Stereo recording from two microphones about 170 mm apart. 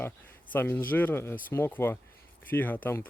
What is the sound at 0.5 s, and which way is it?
Speech, 10° left (ahead or behind).